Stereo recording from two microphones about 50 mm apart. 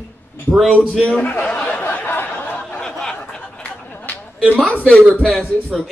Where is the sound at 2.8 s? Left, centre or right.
Centre.